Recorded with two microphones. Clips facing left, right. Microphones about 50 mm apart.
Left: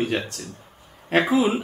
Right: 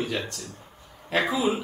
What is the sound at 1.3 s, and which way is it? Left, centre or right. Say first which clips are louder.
Speech: left 5 dB; left.